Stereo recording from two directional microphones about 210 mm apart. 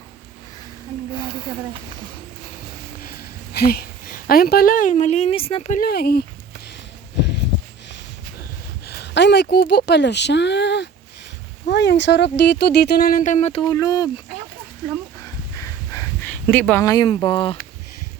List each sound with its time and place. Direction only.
1.1 s speech: 20° left (ahead or behind)
3.0 s a woman's voice: 45° left (ahead or behind); by 5.8 s 30° left (ahead or behind)
5.8 s speech: 50° left (ahead or behind)
8.9 s speech: 55° left (ahead or behind); by 14.1 s 15° left (ahead or behind)
15.2 s a sound: 15° left (ahead or behind)